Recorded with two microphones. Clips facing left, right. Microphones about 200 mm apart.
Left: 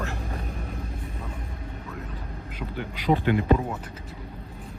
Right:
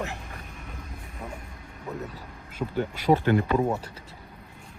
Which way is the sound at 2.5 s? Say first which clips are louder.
Right 6 dB; 45° right (ahead or behind).